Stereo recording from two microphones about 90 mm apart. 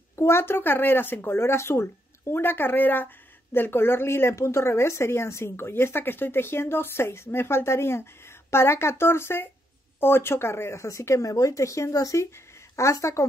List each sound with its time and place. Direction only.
0.1 s speech: 30° left (ahead or behind)